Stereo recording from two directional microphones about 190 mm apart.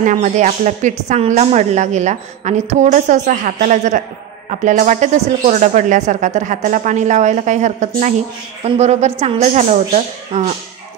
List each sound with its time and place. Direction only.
0.0 s a woman's voice: 40° right (ahead or behind)